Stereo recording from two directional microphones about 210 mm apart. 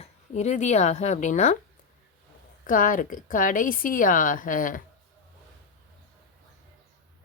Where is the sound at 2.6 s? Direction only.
40° left (ahead or behind).